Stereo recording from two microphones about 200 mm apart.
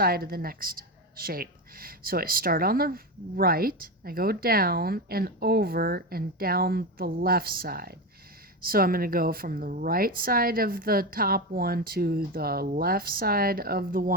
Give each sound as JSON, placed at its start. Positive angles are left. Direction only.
{"t": 0.0, "sound": "a woman's voice", "side_deg": -50}